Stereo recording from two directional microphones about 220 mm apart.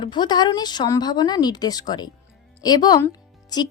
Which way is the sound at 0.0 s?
20° left (ahead or behind).